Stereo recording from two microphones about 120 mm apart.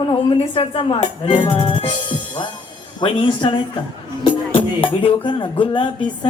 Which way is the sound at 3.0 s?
40° left (ahead or behind).